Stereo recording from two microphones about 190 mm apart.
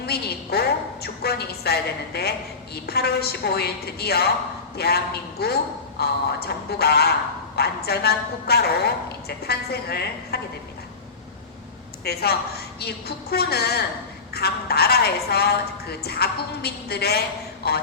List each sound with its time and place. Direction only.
0.0 s a sound: 55° left (ahead or behind)
1.0 s a woman's voice: 55° left (ahead or behind)
12.0 s a woman's voice: 55° left (ahead or behind)